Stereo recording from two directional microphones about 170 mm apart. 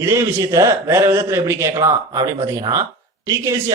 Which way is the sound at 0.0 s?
15° right (ahead or behind).